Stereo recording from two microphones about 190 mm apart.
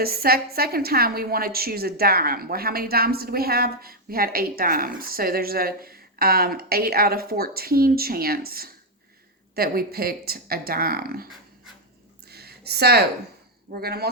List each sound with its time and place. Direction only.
0.0 s a woman's voice: 55° right (ahead or behind)
12.3 s a sound: 55° right (ahead or behind)
13.7 s speech: 55° right (ahead or behind)